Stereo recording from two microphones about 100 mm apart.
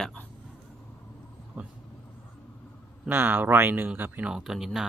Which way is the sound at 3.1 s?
20° right (ahead or behind).